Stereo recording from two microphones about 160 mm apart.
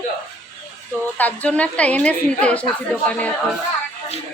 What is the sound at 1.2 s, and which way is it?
A woman's voice, 10° left (ahead or behind).